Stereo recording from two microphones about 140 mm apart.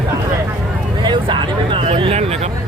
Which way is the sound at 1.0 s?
35° right (ahead or behind).